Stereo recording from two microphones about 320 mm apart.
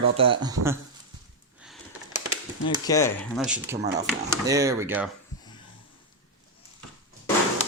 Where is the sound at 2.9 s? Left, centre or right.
Centre.